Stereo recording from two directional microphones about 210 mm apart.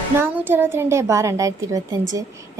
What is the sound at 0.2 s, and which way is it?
A woman's voice, 10° right (ahead or behind).